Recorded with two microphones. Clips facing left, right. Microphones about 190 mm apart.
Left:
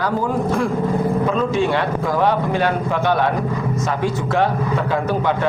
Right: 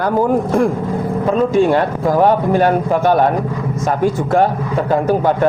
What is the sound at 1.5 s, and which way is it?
A man's voice, 45° right (ahead or behind).